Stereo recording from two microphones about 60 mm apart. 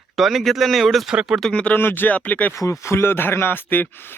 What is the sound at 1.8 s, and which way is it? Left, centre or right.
Speech, left.